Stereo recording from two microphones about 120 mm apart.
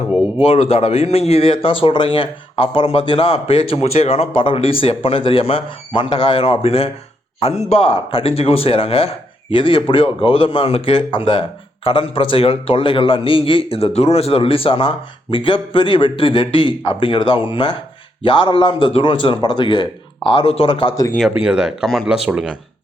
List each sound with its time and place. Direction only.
0.3 s speech: 55° left (ahead or behind)
21.2 s speech: 5° right (ahead or behind)